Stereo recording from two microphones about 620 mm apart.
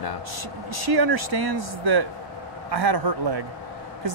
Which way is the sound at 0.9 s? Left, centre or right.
Right.